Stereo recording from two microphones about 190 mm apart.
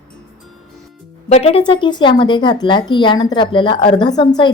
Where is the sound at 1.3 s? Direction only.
35° left (ahead or behind).